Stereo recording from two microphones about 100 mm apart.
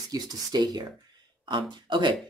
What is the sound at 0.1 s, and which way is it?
Speech, 45° right (ahead or behind).